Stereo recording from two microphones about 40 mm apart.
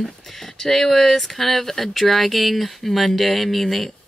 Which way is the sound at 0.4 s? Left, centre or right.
Centre.